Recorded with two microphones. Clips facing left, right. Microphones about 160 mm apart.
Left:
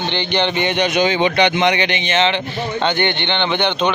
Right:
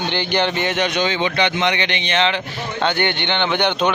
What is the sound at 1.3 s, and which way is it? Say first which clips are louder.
Speech: left 4 dB; 65° left (ahead or behind).